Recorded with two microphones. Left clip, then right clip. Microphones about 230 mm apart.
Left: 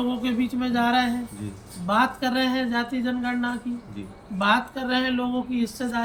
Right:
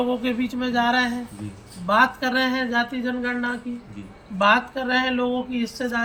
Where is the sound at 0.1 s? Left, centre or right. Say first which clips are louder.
Right 2 dB; centre.